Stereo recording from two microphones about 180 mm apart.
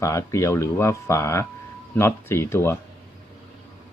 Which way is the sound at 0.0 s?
15° left (ahead or behind).